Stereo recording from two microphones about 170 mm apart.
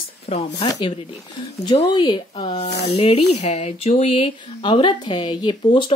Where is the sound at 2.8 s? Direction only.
35° left (ahead or behind).